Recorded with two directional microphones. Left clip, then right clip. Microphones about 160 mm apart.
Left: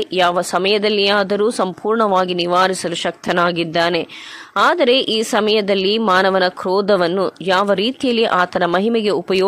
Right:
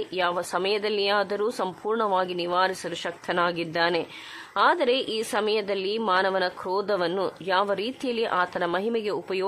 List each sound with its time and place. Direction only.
0.0 s a woman's voice: 40° left (ahead or behind)